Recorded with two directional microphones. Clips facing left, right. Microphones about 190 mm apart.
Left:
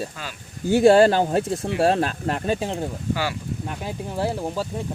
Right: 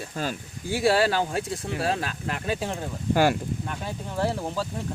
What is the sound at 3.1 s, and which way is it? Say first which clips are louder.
Speech: right 6 dB; 50° right (ahead or behind).